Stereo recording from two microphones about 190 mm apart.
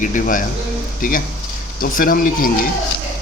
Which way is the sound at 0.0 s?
45° left (ahead or behind).